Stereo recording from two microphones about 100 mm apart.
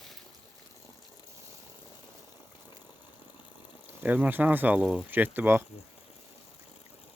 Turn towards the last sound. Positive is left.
turn(degrees=-20)  # may be behind; listen again after turning